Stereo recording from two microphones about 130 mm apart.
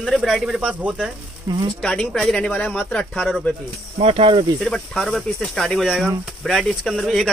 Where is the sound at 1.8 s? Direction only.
5° left (ahead or behind).